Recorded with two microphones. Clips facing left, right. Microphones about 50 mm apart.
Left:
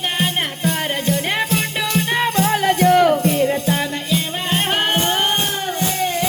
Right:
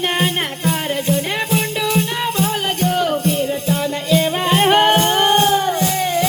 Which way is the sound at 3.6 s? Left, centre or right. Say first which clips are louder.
Right 1 dB; left.